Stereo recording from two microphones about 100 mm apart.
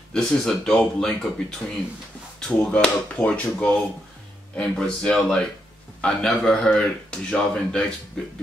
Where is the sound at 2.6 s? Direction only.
10° left (ahead or behind).